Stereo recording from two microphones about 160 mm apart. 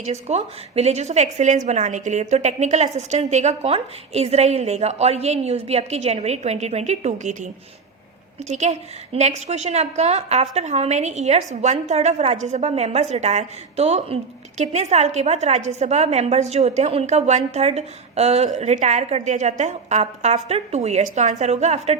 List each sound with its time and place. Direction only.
0.0 s a woman's voice: 45° right (ahead or behind)